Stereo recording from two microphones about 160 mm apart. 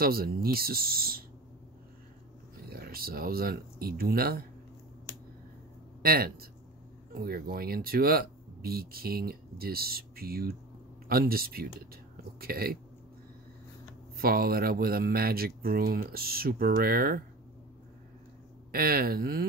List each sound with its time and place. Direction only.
0.0 s speech: 70° right (ahead or behind)
2.7 s speech: 70° right (ahead or behind)
6.0 s speech: 70° right (ahead or behind)
14.1 s speech: 70° right (ahead or behind)
18.7 s speech: 70° right (ahead or behind)